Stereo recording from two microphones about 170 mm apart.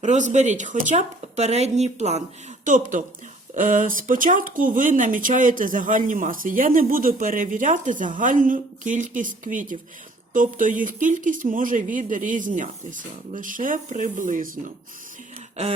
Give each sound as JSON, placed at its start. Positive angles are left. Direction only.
{"t": 0.0, "sound": "speech", "side_deg": -45}